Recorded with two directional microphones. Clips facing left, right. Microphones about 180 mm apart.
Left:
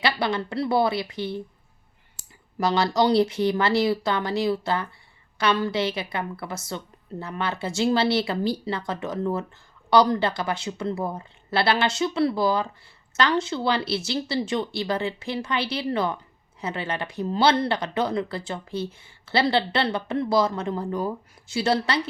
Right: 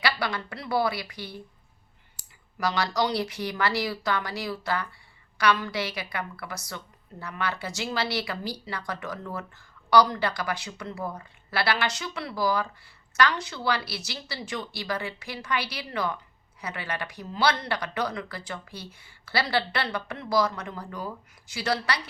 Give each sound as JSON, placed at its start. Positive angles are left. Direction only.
{"t": 0.0, "sound": "speech", "side_deg": 25}